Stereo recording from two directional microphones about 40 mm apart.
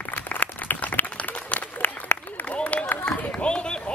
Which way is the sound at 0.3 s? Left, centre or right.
Left.